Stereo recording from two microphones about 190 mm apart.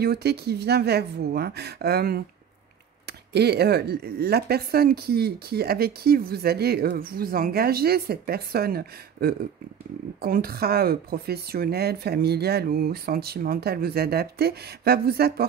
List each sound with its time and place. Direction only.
0.0 s speech: 60° right (ahead or behind)